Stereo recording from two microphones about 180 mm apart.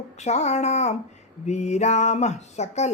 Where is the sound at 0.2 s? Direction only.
40° left (ahead or behind).